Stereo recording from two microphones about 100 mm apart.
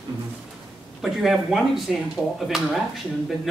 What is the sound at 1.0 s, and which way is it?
Speech, 5° right (ahead or behind).